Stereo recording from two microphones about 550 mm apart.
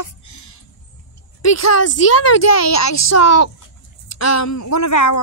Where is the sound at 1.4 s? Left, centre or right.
Left.